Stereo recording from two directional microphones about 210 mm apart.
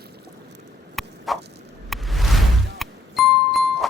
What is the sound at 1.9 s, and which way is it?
Music, centre (ahead or behind).